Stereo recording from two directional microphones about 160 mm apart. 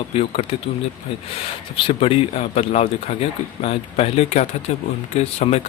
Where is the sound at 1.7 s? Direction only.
35° left (ahead or behind).